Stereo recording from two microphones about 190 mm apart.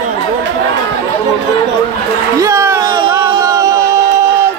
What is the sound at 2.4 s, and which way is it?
Music, 15° right (ahead or behind).